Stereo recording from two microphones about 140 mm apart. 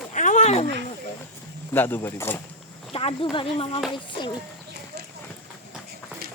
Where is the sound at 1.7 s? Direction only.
15° left (ahead or behind).